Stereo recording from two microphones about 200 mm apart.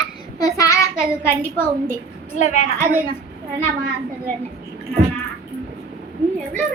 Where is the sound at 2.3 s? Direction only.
35° left (ahead or behind).